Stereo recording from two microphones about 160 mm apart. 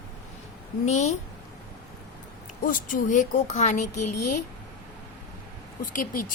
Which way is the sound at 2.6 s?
55° left (ahead or behind).